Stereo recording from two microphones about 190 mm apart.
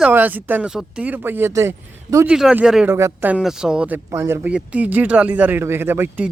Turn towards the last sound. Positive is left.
turn(degrees=-10)  # may be behind; listen again after turning